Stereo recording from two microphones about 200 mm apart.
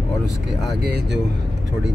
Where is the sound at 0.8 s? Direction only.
55° right (ahead or behind).